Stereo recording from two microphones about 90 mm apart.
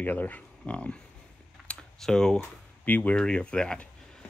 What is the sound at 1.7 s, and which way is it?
Typing, 5° left (ahead or behind).